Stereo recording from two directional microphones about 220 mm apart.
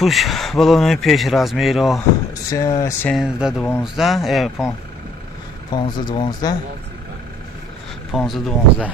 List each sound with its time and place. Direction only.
0.0 s speech: centre (ahead or behind)
2.5 s speech: 15° left (ahead or behind)
3.1 s speech: 5° right (ahead or behind)
5.7 s speech: 20° left (ahead or behind)
8.1 s speech: centre (ahead or behind)